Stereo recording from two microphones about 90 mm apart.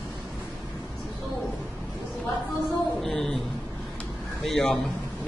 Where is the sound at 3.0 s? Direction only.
5° left (ahead or behind).